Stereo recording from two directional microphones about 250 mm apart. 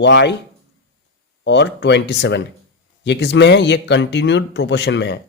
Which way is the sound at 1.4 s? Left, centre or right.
Left.